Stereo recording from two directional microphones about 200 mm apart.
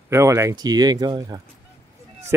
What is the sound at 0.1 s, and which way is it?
Speech, 15° right (ahead or behind).